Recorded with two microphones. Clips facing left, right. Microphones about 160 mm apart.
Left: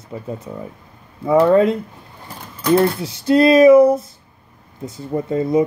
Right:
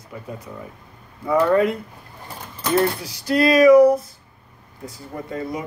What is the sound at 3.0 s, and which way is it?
Speech, 25° left (ahead or behind).